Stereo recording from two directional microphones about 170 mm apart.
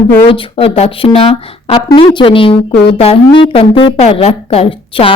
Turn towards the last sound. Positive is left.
turn(degrees=35)  # may be behind; listen again after turning